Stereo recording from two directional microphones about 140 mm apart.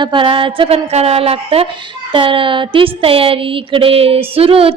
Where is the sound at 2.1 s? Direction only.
35° right (ahead or behind).